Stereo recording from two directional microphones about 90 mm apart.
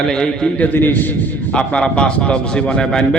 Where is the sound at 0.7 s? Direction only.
20° left (ahead or behind).